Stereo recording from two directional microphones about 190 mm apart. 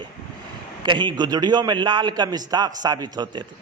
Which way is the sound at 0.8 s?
25° right (ahead or behind).